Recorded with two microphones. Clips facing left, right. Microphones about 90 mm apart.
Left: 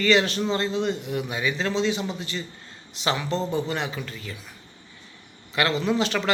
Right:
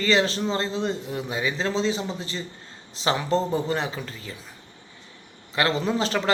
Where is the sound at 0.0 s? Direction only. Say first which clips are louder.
Left 1 dB; 30° right (ahead or behind).